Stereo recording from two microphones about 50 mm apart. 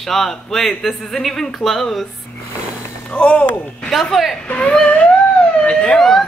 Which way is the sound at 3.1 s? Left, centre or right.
Left.